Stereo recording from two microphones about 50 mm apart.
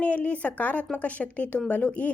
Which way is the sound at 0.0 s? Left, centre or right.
Left.